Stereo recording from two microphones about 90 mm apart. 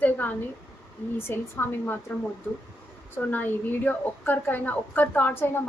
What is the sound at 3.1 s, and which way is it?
A woman's voice, 20° left (ahead or behind).